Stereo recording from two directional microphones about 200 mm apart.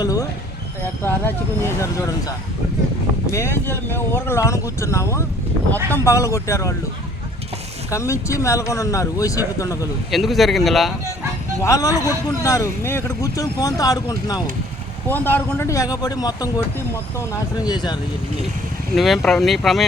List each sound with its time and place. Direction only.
0.0 s a sound: 20° left (ahead or behind)
1.0 s a man's voice: 10° left (ahead or behind)
3.3 s a man's voice: 10° left (ahead or behind)
7.9 s a man's voice: 15° left (ahead or behind)
10.1 s speech: centre (ahead or behind)
11.6 s a man's voice: 15° left (ahead or behind)
18.9 s speech: centre (ahead or behind)